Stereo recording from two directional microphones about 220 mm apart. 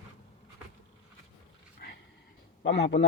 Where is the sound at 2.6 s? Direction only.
55° left (ahead or behind).